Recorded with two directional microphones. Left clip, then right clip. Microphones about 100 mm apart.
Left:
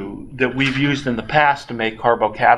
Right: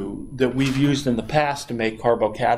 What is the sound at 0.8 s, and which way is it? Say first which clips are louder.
Speech: left 1 dB; 40° right (ahead or behind).